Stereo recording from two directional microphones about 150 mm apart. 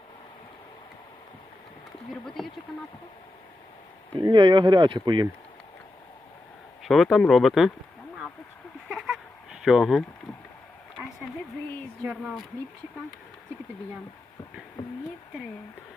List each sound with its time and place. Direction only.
2.2 s speech: centre (ahead or behind)
4.2 s speech: 30° right (ahead or behind)
6.8 s speech: centre (ahead or behind)
8.9 s a sound: centre (ahead or behind)
12.2 s speech: centre (ahead or behind)